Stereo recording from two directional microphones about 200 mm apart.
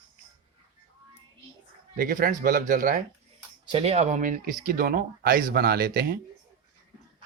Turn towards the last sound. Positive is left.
turn(degrees=-50)  # may be behind; listen again after turning